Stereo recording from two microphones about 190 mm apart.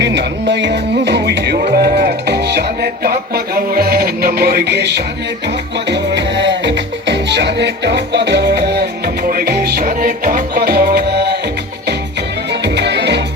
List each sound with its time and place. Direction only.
0.0 s music: 65° right (ahead or behind)
12.6 s music: 65° right (ahead or behind)